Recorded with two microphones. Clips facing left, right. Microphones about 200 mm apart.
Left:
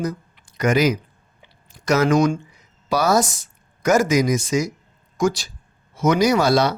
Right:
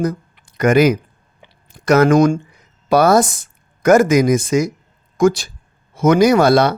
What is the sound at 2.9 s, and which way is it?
Speech, 55° right (ahead or behind).